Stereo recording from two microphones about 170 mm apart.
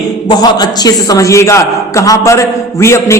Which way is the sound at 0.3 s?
25° left (ahead or behind).